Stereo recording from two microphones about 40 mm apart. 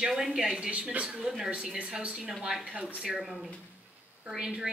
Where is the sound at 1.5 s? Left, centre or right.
Right.